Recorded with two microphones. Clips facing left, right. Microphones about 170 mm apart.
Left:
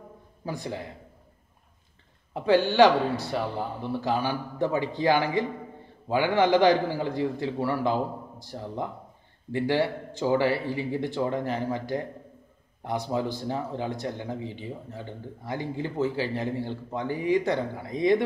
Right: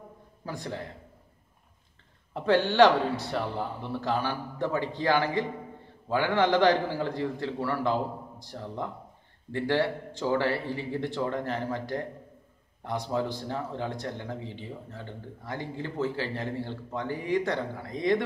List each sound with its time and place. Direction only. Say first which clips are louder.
0.5 s a man's voice: left 3 dB; 10° left (ahead or behind)
2.3 s a man's voice: left 2 dB; 5° left (ahead or behind)